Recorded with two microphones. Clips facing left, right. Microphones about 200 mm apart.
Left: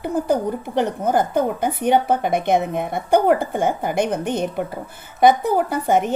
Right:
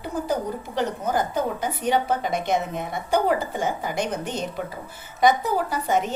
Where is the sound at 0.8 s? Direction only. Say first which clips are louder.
Left 5 dB; 55° left (ahead or behind).